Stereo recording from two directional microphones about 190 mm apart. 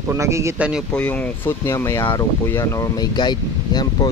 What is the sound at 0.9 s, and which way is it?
Speech, 5° left (ahead or behind).